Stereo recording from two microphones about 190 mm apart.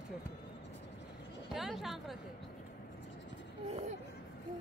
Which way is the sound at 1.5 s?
Centre (ahead or behind).